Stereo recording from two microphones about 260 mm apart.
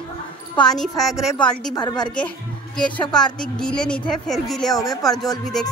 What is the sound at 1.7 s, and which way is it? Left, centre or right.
Speech, centre.